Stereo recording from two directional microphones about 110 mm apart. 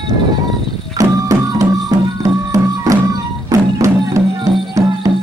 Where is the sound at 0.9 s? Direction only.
30° right (ahead or behind).